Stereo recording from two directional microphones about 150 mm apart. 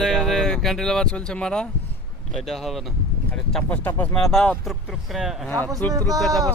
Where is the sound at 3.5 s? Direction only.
10° left (ahead or behind).